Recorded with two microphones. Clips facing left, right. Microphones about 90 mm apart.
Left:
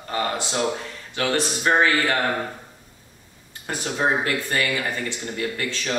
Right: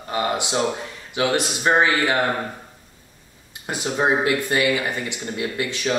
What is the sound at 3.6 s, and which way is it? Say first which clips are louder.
Speech: right 2 dB; 20° right (ahead or behind).